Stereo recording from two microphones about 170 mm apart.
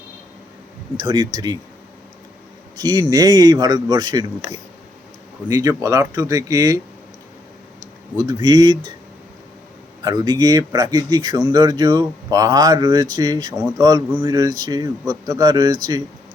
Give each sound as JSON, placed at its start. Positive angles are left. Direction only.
{"t": 0.9, "sound": "a man's voice", "side_deg": -25}
{"t": 2.7, "sound": "a man's voice", "side_deg": -25}
{"t": 5.5, "sound": "a man's voice", "side_deg": -20}
{"t": 8.3, "sound": "a man's voice", "side_deg": -25}
{"t": 10.0, "sound": "a man's voice", "side_deg": -25}